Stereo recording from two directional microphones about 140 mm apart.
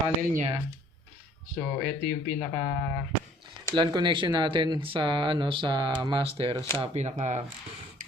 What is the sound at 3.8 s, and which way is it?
Speech, 35° right (ahead or behind).